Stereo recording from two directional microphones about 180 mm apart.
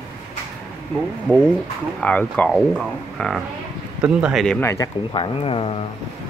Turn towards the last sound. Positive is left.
turn(degrees=30)  # may be behind; listen again after turning